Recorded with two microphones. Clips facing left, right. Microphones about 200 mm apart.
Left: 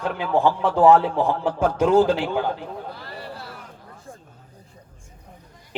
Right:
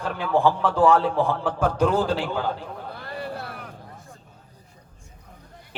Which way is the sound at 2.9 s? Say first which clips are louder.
Right 3 dB; 55° right (ahead or behind).